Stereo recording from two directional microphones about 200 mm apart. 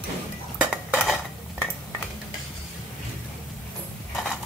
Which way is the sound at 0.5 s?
Centre (ahead or behind).